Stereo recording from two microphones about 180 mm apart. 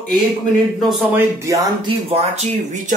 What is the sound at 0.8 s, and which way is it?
Speech, centre (ahead or behind).